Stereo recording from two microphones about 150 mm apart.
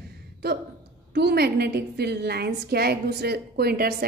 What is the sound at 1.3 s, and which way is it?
A woman's voice, 90° right.